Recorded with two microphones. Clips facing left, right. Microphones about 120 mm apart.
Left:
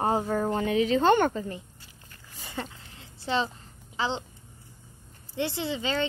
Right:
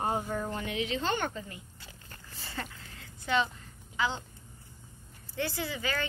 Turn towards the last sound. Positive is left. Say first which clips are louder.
# left 5 dB
turn(degrees=25)  # may be behind; listen again after turning